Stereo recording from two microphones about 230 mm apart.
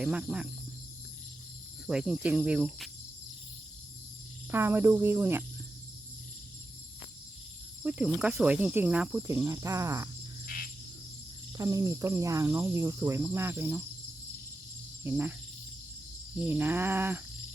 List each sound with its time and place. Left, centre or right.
0.0 s cricket: centre
1.9 s cricket: centre
4.5 s cricket: centre
7.8 s cricket: centre
10.4 s cricket: left
11.5 s cricket: centre
15.0 s cricket: centre
16.4 s cricket: centre